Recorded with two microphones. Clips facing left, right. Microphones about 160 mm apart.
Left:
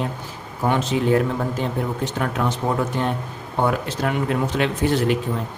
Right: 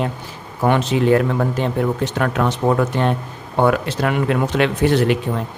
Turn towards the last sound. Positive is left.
turn(degrees=-75)  # may be behind; listen again after turning